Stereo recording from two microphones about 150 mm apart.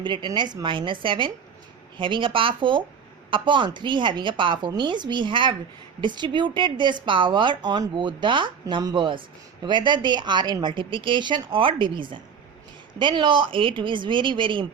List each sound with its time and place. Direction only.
0.0 s a woman's voice: 30° right (ahead or behind)